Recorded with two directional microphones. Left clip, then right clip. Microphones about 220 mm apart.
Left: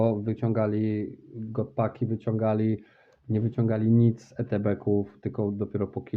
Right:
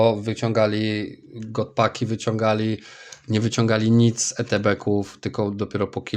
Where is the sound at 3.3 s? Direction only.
25° right (ahead or behind).